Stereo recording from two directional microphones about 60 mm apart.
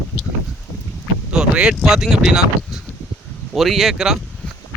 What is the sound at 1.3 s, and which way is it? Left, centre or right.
Speech, centre.